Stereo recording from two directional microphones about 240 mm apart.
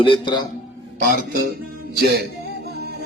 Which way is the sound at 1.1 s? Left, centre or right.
Right.